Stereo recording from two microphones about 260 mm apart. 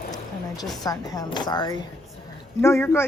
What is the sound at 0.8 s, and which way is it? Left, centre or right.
Speech, centre.